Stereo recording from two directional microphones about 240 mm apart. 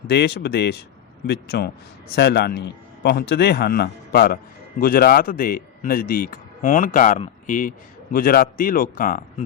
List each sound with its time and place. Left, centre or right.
0.1 s speech: left